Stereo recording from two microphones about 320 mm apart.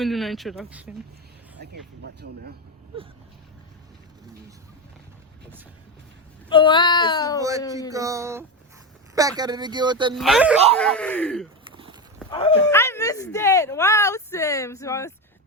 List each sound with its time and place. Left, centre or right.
0.0 s speech: centre
1.6 s speech: right
6.5 s speech: centre
7.9 s speech: centre
10.2 s speech: centre
12.3 s speech: centre